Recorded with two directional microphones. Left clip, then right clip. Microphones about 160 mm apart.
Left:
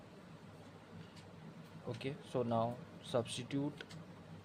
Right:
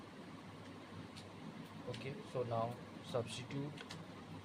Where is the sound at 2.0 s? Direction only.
55° left (ahead or behind).